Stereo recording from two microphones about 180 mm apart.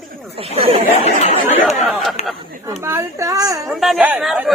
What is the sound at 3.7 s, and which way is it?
Speech, centre (ahead or behind).